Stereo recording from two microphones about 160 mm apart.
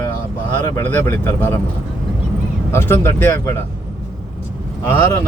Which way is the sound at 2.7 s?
15° left (ahead or behind).